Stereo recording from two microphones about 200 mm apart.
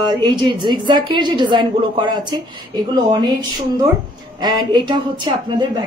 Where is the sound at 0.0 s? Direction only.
20° right (ahead or behind).